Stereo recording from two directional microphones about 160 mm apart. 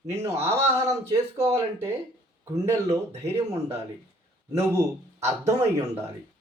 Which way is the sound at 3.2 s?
15° right (ahead or behind).